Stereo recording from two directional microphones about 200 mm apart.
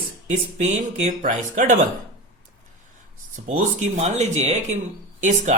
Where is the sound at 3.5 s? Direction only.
35° right (ahead or behind).